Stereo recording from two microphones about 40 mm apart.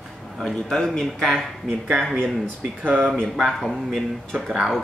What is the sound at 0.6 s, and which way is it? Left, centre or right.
Speech, centre.